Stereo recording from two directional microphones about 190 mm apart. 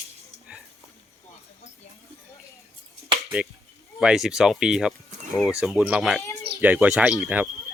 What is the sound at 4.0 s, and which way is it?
Speech, 5° right (ahead or behind).